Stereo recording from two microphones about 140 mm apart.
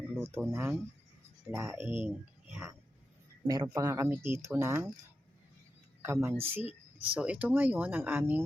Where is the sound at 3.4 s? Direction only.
30° right (ahead or behind).